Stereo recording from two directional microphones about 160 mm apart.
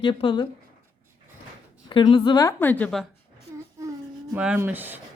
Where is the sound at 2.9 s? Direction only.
5° left (ahead or behind).